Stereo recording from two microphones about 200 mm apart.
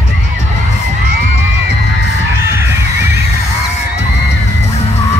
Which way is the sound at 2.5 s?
15° right (ahead or behind).